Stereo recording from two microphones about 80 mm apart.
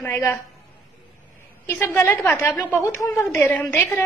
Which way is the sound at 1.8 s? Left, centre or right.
Left.